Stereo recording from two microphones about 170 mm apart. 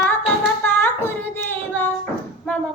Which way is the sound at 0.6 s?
10° left (ahead or behind).